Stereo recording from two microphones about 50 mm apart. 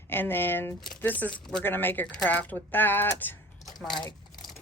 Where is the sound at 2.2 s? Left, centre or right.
Left.